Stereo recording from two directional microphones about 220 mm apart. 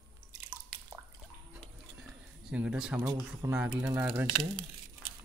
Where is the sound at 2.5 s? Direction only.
5° right (ahead or behind).